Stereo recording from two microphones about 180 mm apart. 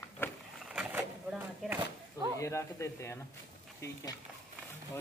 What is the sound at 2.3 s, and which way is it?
Speech, 15° left (ahead or behind).